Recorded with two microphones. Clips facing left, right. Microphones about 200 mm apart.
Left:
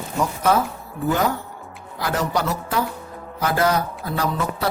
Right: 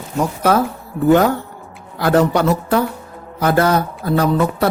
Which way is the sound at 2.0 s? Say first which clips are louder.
Right 9 dB; 60° right (ahead or behind).